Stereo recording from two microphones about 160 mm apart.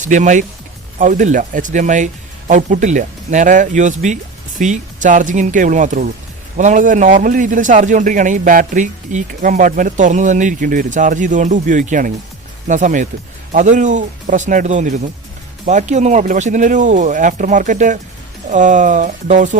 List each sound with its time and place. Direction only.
0.0 s a man's voice: 50° right (ahead or behind)